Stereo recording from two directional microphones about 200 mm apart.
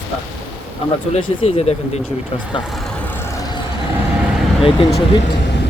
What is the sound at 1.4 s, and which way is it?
Speech, 30° left (ahead or behind).